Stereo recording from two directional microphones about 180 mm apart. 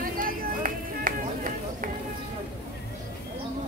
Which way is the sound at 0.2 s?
50° right (ahead or behind).